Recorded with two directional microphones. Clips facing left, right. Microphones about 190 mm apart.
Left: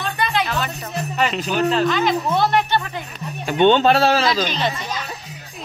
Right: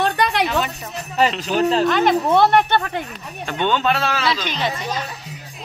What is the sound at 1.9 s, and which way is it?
Speech, 55° right (ahead or behind).